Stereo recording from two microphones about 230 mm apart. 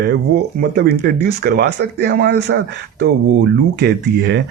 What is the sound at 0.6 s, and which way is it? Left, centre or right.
Speech, right.